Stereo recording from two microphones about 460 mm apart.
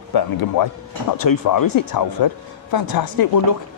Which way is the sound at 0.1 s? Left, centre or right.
Left.